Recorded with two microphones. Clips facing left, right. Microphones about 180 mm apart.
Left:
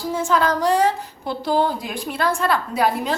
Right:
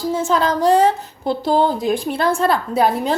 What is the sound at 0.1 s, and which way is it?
A woman's voice, 20° right (ahead or behind).